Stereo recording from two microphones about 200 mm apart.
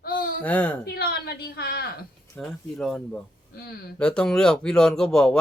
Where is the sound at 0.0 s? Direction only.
45° left (ahead or behind).